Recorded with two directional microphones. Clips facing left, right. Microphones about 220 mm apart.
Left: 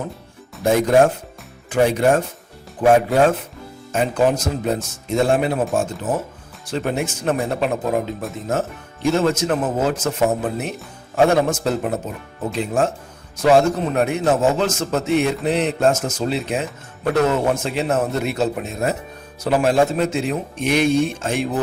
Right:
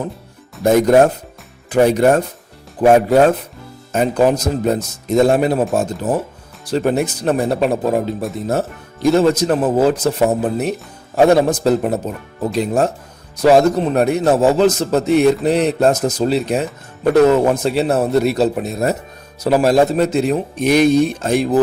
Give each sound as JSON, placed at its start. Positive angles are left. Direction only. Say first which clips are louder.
{"t": 0.6, "sound": "speech", "louder": "right 4 dB", "side_deg": -40}